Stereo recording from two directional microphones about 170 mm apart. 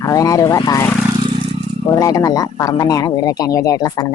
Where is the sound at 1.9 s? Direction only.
20° left (ahead or behind).